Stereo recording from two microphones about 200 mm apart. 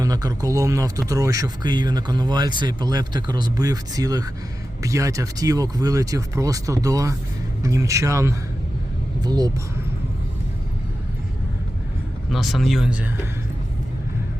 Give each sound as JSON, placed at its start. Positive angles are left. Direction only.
{"t": 0.0, "sound": "speech", "side_deg": -20}
{"t": 12.3, "sound": "speech", "side_deg": 0}